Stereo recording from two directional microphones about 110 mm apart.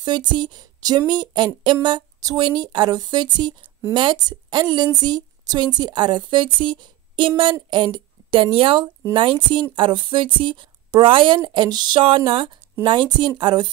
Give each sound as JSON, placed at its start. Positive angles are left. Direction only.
{"t": 0.0, "sound": "a woman's voice", "side_deg": -45}